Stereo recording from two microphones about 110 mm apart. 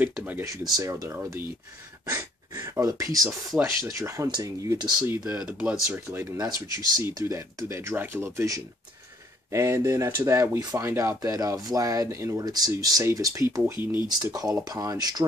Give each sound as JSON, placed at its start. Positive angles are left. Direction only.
{"t": 0.0, "sound": "speech", "side_deg": -15}
{"t": 0.7, "sound": "speech", "side_deg": -30}
{"t": 3.3, "sound": "speech", "side_deg": -20}
{"t": 5.2, "sound": "speech", "side_deg": -10}